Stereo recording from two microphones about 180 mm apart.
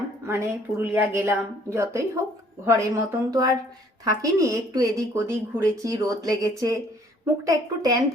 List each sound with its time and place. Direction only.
0.3 s a woman's voice: 15° right (ahead or behind)